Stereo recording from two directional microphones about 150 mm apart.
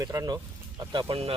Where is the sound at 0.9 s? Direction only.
35° right (ahead or behind).